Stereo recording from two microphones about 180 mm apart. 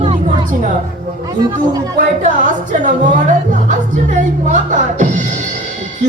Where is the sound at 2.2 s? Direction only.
45° right (ahead or behind).